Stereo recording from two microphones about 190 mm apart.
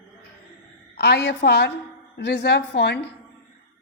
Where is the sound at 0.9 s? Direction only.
60° left (ahead or behind).